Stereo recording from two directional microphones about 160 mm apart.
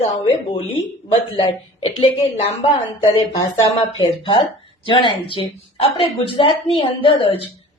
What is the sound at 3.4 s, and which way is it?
Speech, 20° left (ahead or behind).